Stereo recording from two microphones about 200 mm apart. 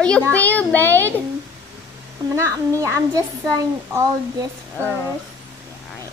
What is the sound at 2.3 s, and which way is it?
A woman's voice, 15° right (ahead or behind).